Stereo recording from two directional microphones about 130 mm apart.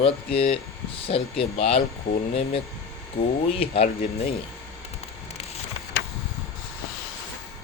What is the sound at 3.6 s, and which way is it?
Speech, 50° left (ahead or behind).